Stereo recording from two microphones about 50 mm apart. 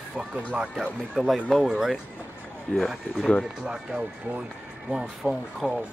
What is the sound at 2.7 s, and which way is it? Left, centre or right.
Speech, centre.